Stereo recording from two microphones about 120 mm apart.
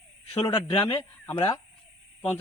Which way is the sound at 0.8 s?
20° left (ahead or behind).